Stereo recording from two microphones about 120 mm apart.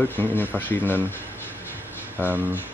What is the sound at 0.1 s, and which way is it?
Speech, 15° left (ahead or behind).